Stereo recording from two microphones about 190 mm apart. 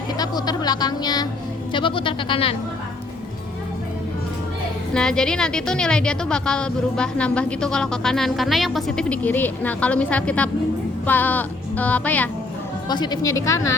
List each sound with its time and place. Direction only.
0.2 s speech: 20° left (ahead or behind)
4.9 s a woman's voice: 5° left (ahead or behind)
11.0 s music: 10° left (ahead or behind)
12.9 s music: 20° left (ahead or behind)